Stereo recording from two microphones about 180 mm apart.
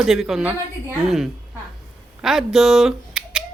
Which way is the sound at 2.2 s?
Centre (ahead or behind).